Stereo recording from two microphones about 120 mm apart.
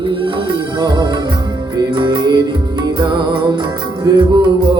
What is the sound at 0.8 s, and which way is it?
Music, 40° right (ahead or behind).